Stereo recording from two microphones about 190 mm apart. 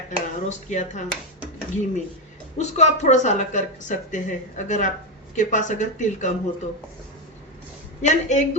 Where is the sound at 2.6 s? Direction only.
35° left (ahead or behind).